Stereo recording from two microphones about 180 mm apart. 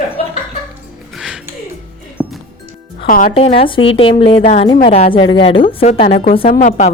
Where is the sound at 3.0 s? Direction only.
50° left (ahead or behind).